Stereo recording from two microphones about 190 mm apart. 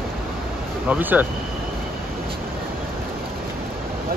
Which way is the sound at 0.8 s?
10° right (ahead or behind).